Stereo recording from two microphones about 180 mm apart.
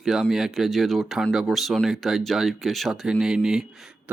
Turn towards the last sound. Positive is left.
turn(degrees=-5)  # may be behind; listen again after turning